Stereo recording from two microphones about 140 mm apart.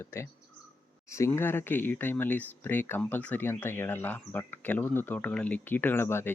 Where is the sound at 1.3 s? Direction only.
15° left (ahead or behind).